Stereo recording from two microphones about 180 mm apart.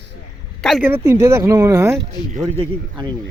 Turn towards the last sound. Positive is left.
turn(degrees=-25)  # may be behind; listen again after turning